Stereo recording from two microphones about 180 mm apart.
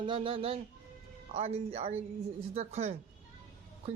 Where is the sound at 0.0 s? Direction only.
30° right (ahead or behind).